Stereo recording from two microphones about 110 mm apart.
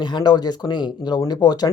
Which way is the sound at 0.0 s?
40° left (ahead or behind).